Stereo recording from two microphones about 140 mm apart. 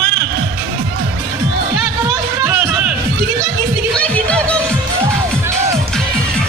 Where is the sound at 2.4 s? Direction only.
15° right (ahead or behind).